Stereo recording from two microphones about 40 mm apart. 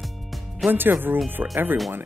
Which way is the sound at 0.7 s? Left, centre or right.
Right.